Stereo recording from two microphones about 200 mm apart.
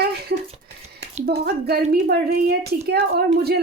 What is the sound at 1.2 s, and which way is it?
A woman's voice, 50° right (ahead or behind).